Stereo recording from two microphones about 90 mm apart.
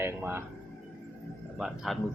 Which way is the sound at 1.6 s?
Centre (ahead or behind).